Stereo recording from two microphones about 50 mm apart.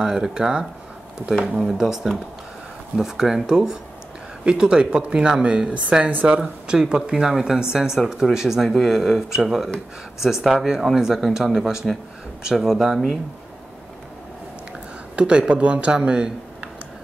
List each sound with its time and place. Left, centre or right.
0.0 s speech: centre
15.1 s speech: right